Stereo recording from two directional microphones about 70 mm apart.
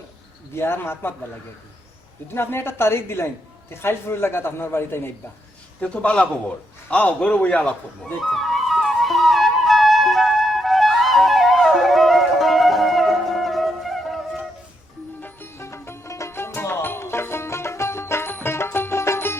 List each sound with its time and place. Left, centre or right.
0.5 s a man's voice: left
2.3 s a man's voice: left
5.8 s a man's voice: centre
8.2 s flute: centre
15.2 s music: left